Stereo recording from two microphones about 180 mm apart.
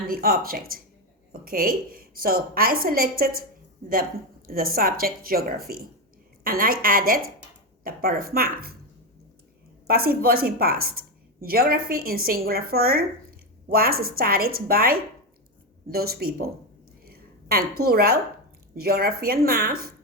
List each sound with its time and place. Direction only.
0.1 s a woman's voice: 55° right (ahead or behind)
4.4 s a woman's voice: 55° right (ahead or behind)
9.8 s a woman's voice: 55° right (ahead or behind)
17.1 s a sound: 60° right (ahead or behind)
18.8 s a woman's voice: 60° right (ahead or behind)